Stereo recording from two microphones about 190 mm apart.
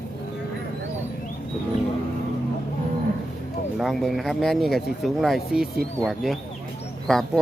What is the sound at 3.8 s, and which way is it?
Speech, centre (ahead or behind).